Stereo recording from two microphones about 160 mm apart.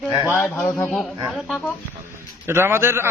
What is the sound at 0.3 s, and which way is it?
Speech, 15° left (ahead or behind).